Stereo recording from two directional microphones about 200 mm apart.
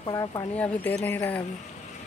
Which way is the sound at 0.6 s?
5° left (ahead or behind).